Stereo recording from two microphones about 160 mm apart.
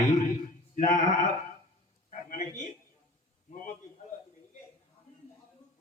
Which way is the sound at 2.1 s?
55° left (ahead or behind).